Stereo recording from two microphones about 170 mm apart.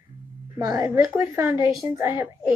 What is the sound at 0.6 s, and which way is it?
A woman's voice, 20° right (ahead or behind).